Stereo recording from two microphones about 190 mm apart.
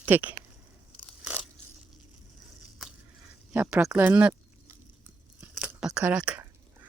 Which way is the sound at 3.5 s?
5° right (ahead or behind).